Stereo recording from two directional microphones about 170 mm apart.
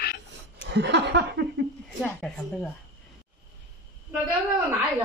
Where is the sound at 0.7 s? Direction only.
90° right.